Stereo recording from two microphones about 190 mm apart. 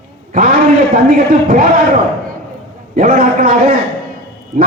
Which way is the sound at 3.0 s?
50° right (ahead or behind).